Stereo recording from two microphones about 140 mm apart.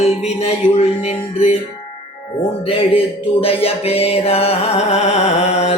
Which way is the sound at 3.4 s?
45° left (ahead or behind).